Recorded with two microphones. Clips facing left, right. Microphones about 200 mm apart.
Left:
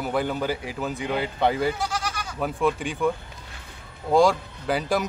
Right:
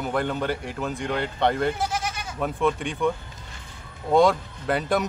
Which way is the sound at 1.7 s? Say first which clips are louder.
Right 1 dB; 25° right (ahead or behind).